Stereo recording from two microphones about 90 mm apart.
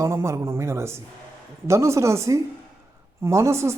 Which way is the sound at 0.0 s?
30° right (ahead or behind).